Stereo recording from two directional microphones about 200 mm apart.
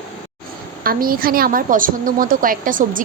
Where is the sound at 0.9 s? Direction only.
45° right (ahead or behind).